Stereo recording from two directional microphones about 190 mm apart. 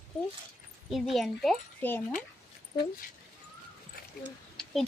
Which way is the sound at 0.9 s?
Centre (ahead or behind).